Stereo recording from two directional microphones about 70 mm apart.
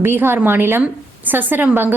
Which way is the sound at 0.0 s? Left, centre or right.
Right.